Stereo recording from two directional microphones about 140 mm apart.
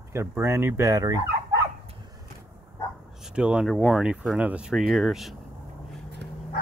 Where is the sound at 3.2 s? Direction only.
5° right (ahead or behind).